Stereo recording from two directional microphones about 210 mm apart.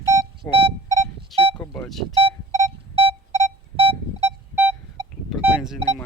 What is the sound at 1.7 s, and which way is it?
Speech, centre (ahead or behind).